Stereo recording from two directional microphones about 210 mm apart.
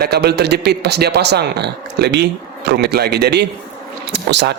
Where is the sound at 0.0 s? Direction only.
50° right (ahead or behind).